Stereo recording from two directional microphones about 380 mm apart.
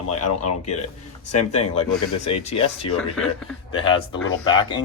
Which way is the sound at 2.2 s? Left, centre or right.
Centre.